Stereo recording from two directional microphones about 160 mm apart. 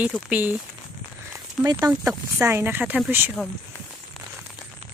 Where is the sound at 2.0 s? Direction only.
15° right (ahead or behind).